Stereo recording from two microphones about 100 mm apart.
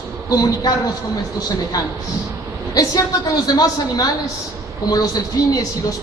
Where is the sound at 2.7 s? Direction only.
35° left (ahead or behind).